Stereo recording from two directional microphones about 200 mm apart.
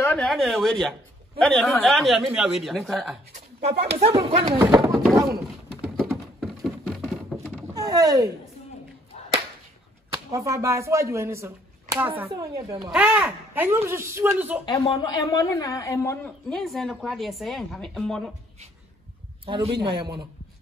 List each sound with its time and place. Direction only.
0.0 s speech: centre (ahead or behind)
3.3 s a sound: 35° right (ahead or behind)
4.2 s speech: 30° right (ahead or behind)
4.5 s speech: 20° right (ahead or behind)
5.8 s a sound: 5° right (ahead or behind)
7.6 s a sound: 20° right (ahead or behind)
10.1 s speech: 15° right (ahead or behind)
12.9 s speech: 5° right (ahead or behind)
14.7 s a woman's voice: 20° left (ahead or behind)
16.5 s speech: centre (ahead or behind)
19.4 s a man's voice: 25° right (ahead or behind)